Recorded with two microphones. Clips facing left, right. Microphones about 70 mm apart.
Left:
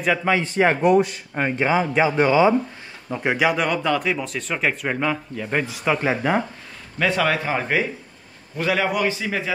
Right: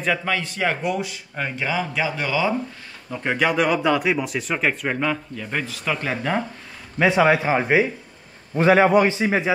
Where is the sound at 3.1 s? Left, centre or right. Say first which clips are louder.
Left 1 dB; centre.